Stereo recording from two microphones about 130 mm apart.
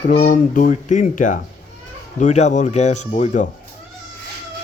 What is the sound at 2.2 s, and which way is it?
Speech, 65° left (ahead or behind).